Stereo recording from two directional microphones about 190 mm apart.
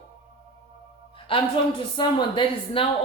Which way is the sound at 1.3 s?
30° left (ahead or behind).